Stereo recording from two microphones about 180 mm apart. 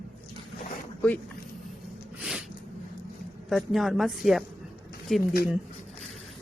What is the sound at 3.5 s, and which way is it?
A woman's voice, centre (ahead or behind).